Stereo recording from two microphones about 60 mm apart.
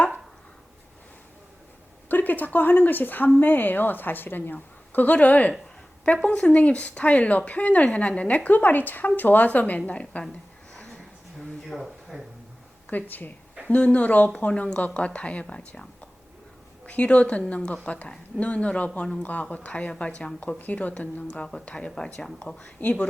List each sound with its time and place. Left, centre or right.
2.0 s a woman's voice: left
11.7 s a sound: centre
12.9 s a woman's voice: left